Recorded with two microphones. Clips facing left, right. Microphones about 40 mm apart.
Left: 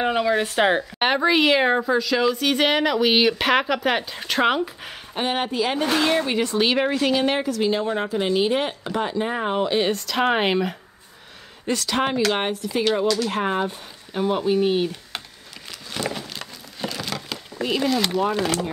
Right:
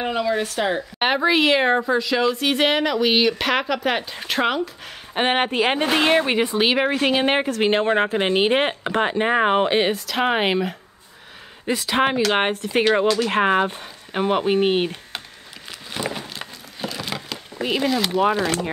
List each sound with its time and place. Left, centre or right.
0.0 s speech: centre
0.6 s speech: left
0.9 s a woman's voice: centre
5.1 s a woman's voice: right
6.4 s speech: centre
7.0 s a woman's voice: right
9.9 s a woman's voice: centre
12.3 s a woman's voice: right
15.9 s a sound: centre
16.8 s a sound: centre
17.6 s speech: centre